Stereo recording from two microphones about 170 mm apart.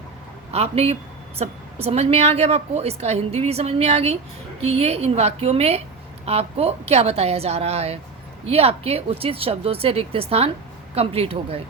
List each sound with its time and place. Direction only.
0.5 s a woman's voice: 35° right (ahead or behind)